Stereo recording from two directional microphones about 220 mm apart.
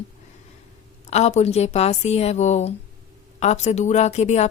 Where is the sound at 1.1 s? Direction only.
30° left (ahead or behind).